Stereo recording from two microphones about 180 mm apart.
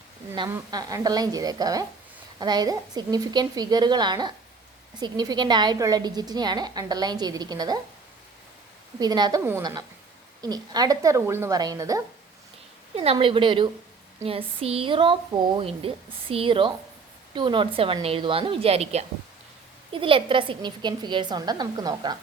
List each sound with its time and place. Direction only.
0.3 s a woman's voice: 20° right (ahead or behind)
9.0 s a woman's voice: 20° right (ahead or behind)
13.0 s a woman's voice: 30° right (ahead or behind)